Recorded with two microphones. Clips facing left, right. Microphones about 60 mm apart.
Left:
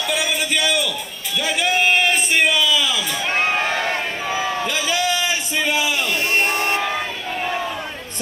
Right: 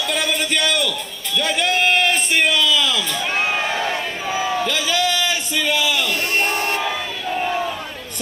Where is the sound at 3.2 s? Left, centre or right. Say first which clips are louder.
Left 2 dB; left.